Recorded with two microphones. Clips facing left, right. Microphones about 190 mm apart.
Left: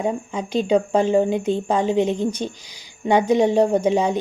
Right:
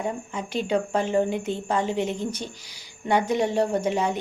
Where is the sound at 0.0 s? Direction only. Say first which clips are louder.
Left 6 dB; 15° left (ahead or behind).